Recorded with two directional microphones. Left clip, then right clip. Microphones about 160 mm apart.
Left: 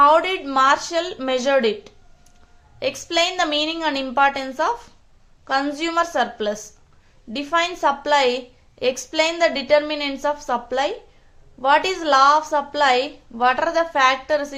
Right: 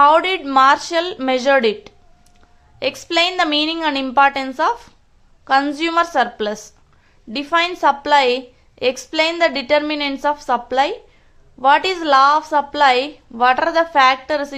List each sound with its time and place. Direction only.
0.0 s a woman's voice: 25° right (ahead or behind)